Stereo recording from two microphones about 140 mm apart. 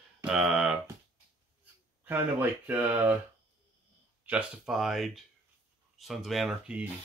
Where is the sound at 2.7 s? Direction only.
15° right (ahead or behind).